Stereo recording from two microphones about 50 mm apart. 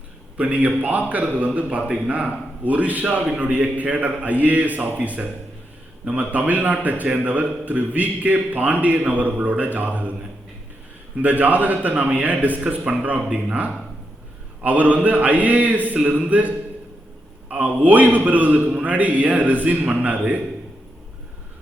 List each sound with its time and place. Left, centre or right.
0.3 s a man's voice: right
11.2 s a man's voice: right